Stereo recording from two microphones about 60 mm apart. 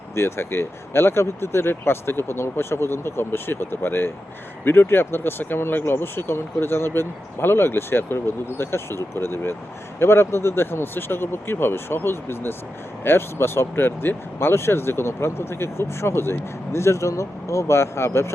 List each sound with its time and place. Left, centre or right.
0.1 s speech: left